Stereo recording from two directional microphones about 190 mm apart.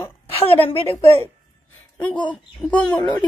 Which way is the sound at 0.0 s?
30° left (ahead or behind).